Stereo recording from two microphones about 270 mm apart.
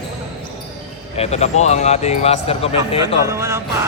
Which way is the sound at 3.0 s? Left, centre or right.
Centre.